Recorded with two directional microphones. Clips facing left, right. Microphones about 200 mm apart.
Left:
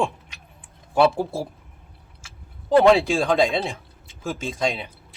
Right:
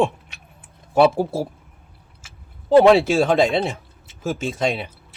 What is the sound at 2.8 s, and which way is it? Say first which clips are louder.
Speech: right 3 dB; centre (ahead or behind).